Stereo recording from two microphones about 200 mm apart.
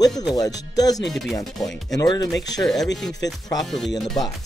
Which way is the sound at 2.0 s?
20° left (ahead or behind).